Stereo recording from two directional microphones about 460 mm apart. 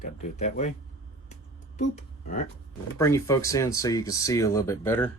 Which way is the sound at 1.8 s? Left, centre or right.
Centre.